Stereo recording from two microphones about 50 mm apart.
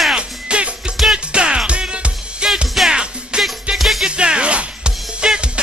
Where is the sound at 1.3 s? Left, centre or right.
Centre.